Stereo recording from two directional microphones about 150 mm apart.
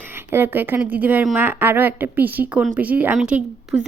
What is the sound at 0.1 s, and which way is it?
A woman's voice, 15° right (ahead or behind).